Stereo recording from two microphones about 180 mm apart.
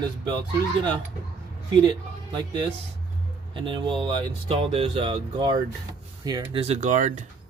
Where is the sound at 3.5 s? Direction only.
30° right (ahead or behind).